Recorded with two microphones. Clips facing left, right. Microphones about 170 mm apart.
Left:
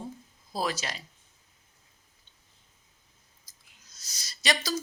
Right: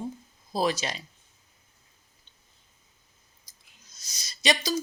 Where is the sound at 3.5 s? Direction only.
15° right (ahead or behind).